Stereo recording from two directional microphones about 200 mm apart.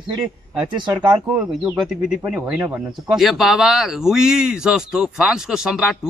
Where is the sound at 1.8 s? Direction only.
Centre (ahead or behind).